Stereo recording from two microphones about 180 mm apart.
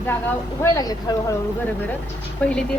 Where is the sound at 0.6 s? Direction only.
20° left (ahead or behind).